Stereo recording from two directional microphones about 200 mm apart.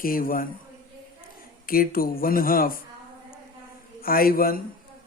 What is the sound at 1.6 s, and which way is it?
A man's voice, 45° left (ahead or behind).